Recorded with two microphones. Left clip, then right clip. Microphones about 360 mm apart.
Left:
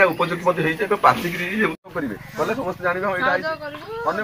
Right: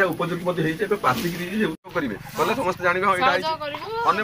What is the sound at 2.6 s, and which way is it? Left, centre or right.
Speech, centre.